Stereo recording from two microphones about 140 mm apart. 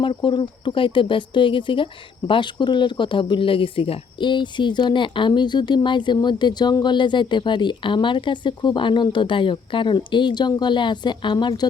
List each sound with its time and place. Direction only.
0.0 s speech: 35° left (ahead or behind)